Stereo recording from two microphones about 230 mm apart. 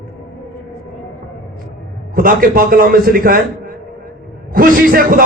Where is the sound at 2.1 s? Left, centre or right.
Right.